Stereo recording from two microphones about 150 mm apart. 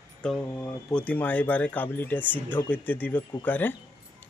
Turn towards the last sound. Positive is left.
turn(degrees=10)  # may be behind; listen again after turning